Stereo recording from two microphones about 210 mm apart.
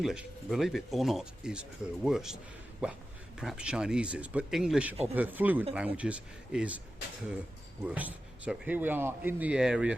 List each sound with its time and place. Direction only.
0.0 s a man's voice: centre (ahead or behind)
7.9 s a man's voice: 5° right (ahead or behind)